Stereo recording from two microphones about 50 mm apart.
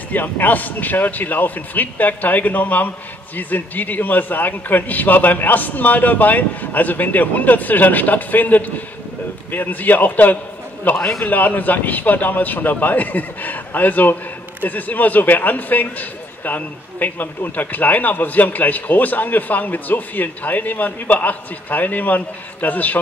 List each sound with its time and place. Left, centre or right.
0.1 s a man's voice: left